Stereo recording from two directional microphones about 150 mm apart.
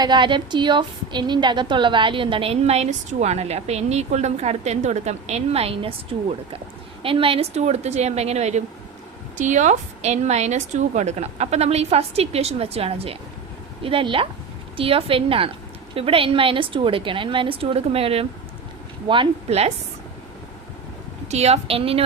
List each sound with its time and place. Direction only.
0.0 s a woman's voice: 30° right (ahead or behind)
21.2 s a woman's voice: 45° right (ahead or behind)